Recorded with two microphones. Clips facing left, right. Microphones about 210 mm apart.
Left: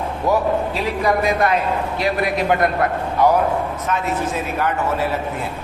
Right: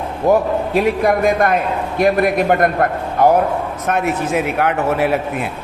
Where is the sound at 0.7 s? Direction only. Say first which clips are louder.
Right 5 dB; 55° right (ahead or behind).